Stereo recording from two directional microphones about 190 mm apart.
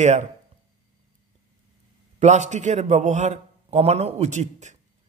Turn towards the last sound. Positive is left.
turn(degrees=-40)  # may be behind; listen again after turning